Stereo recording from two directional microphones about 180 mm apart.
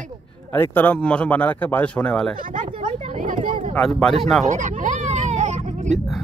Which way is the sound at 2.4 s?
45° right (ahead or behind).